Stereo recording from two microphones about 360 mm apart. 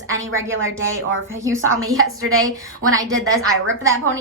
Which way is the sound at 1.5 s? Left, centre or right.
Centre.